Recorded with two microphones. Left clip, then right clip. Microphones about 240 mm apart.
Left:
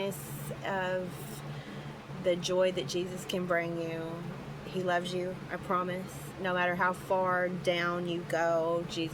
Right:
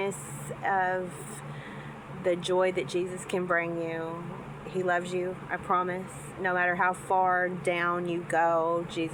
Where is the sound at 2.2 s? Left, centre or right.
Left.